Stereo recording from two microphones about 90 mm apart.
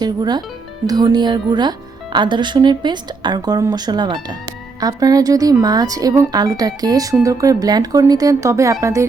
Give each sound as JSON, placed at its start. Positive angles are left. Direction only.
{"t": 0.0, "sound": "a woman's voice", "side_deg": -50}
{"t": 4.8, "sound": "speech", "side_deg": -40}